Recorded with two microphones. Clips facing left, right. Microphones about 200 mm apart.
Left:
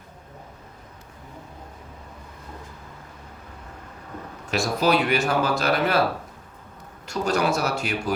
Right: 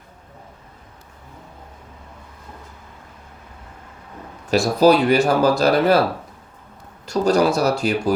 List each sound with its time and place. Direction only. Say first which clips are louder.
4.5 s speech: right 7 dB; 35° right (ahead or behind)
7.0 s speech: right 7 dB; 35° right (ahead or behind)